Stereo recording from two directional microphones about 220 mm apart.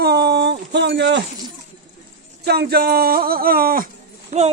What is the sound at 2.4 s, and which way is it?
Speech, 45° right (ahead or behind).